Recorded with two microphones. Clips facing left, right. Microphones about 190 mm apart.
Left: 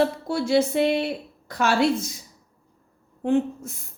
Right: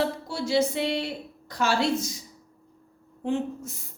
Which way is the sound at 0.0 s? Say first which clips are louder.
Left 5 dB; 55° left (ahead or behind).